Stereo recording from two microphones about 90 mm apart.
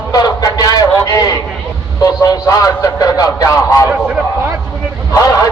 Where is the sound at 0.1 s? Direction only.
45° left (ahead or behind).